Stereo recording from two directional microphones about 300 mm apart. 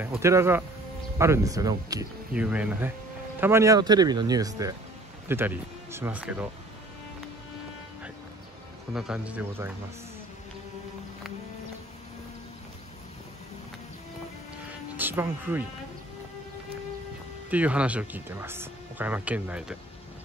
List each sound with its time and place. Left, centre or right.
0.0 s speech: centre
8.9 s speech: centre
14.7 s music: centre
17.5 s speech: centre